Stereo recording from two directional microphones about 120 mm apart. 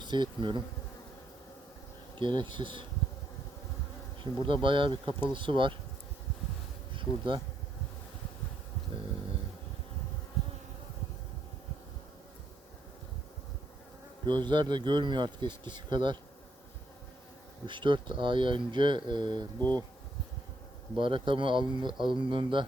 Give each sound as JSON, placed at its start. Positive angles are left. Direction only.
{"t": 0.0, "sound": "bee", "side_deg": -40}
{"t": 2.1, "sound": "speech", "side_deg": -40}
{"t": 4.2, "sound": "speech", "side_deg": -45}
{"t": 6.9, "sound": "speech", "side_deg": -45}
{"t": 14.3, "sound": "speech", "side_deg": -40}
{"t": 17.7, "sound": "speech", "side_deg": -40}
{"t": 20.9, "sound": "speech", "side_deg": -45}